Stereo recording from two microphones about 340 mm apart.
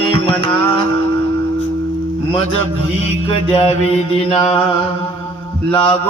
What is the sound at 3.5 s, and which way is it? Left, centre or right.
Mantra, centre.